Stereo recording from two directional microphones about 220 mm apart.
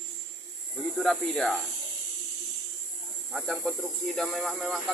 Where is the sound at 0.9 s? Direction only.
Centre (ahead or behind).